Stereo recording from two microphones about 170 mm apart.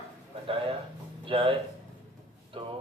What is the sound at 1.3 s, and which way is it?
Speech, 30° right (ahead or behind).